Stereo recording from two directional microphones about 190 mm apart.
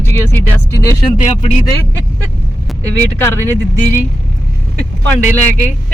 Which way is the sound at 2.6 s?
10° left (ahead or behind).